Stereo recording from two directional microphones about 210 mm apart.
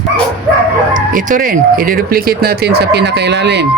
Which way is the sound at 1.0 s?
40° right (ahead or behind).